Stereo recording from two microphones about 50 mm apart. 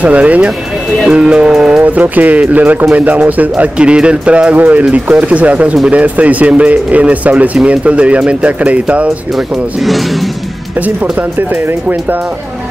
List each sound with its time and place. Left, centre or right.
0.0 s speech: right; by 1.8 s centre
1.8 s speech: right